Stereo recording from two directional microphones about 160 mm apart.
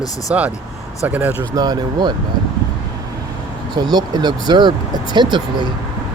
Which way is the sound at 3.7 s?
25° right (ahead or behind).